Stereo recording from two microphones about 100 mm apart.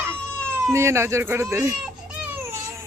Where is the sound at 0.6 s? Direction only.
30° right (ahead or behind).